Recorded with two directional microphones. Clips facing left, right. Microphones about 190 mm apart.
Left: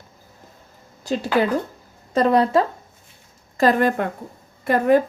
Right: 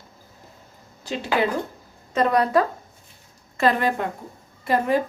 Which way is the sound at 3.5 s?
40° left (ahead or behind).